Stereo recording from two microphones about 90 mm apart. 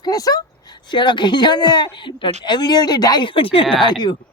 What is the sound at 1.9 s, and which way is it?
A woman's voice, 65° left (ahead or behind).